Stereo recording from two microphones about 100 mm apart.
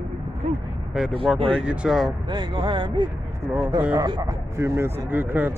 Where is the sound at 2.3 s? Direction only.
50° right (ahead or behind).